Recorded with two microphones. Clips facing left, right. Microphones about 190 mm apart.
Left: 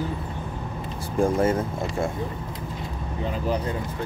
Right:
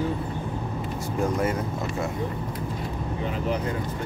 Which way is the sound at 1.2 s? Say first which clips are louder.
Left 5 dB; 25° left (ahead or behind).